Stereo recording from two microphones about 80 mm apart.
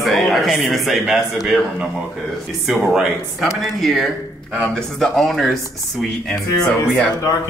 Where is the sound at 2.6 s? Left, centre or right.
Centre.